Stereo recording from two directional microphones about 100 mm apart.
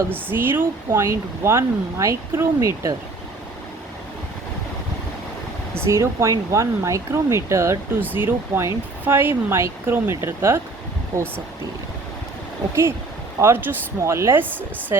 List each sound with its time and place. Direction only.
0.1 s speech: 20° right (ahead or behind)
5.7 s speech: 25° right (ahead or behind)
13.4 s speech: 20° right (ahead or behind)